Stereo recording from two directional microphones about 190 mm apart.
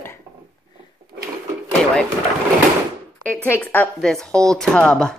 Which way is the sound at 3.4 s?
10° left (ahead or behind).